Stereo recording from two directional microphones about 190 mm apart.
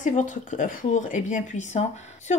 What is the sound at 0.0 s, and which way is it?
Speech, 40° left (ahead or behind).